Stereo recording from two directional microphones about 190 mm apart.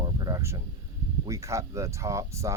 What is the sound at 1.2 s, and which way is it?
Speech, 15° right (ahead or behind).